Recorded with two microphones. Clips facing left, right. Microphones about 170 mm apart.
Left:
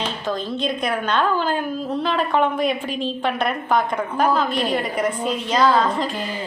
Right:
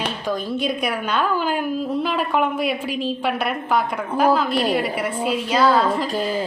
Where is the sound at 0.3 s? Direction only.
10° right (ahead or behind).